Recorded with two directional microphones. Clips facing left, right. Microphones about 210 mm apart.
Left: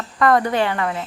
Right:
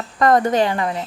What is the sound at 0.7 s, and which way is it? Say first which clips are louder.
Speech: right 1 dB; 25° right (ahead or behind).